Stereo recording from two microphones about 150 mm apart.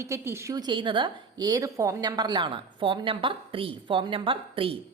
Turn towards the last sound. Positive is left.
turn(degrees=-35)  # may be behind; listen again after turning